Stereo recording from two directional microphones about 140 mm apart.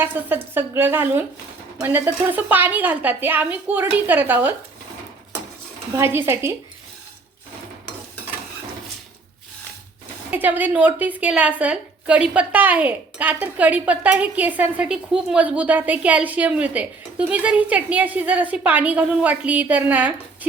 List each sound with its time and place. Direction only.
0.0 s a woman's voice: 15° right (ahead or behind)
6.0 s a woman's voice: 15° right (ahead or behind)
10.3 s a woman's voice: 15° right (ahead or behind)